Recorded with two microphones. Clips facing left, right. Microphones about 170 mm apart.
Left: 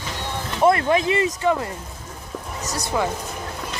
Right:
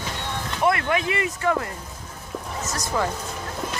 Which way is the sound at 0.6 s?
30° left (ahead or behind).